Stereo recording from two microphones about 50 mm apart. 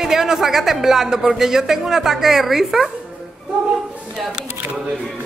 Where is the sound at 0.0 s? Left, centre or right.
Centre.